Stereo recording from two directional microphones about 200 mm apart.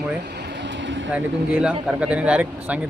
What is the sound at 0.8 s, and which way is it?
Vehicle, 65° right (ahead or behind).